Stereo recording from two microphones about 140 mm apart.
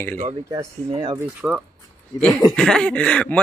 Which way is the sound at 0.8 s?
35° right (ahead or behind).